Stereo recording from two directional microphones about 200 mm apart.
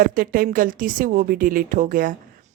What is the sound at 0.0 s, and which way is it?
A woman's voice, 45° right (ahead or behind).